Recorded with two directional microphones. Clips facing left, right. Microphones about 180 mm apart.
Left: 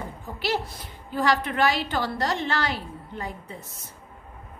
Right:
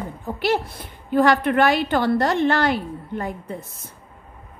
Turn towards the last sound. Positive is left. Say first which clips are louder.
# right 7 dB
turn(degrees=-55)  # may be behind; listen again after turning